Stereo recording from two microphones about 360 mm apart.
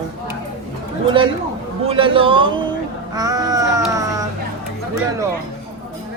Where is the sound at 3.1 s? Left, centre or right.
Centre.